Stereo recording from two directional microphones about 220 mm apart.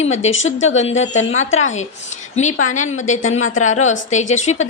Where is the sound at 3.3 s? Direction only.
65° left (ahead or behind).